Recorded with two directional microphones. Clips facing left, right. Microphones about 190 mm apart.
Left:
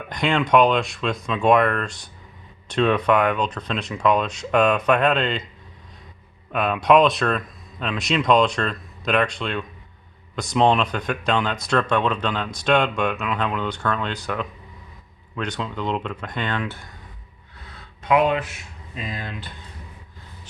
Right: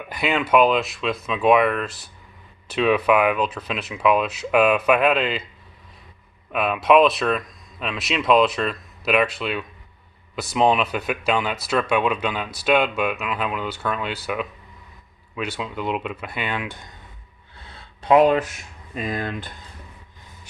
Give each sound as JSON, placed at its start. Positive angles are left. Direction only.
{"t": 0.1, "sound": "speech", "side_deg": -5}
{"t": 6.5, "sound": "speech", "side_deg": -5}
{"t": 17.6, "sound": "a sound", "side_deg": -30}
{"t": 18.9, "sound": "speech", "side_deg": -50}